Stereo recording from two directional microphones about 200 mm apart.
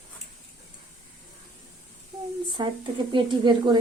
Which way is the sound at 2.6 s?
25° right (ahead or behind).